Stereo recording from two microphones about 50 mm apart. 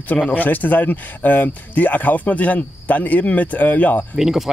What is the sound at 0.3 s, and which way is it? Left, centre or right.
Speech, left.